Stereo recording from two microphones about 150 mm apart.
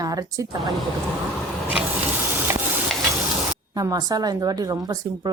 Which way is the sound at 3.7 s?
25° right (ahead or behind).